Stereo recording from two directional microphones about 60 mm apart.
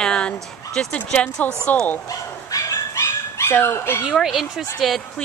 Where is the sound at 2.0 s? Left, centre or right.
Left.